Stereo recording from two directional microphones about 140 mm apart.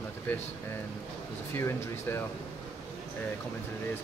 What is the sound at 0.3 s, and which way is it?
Speech, 10° left (ahead or behind).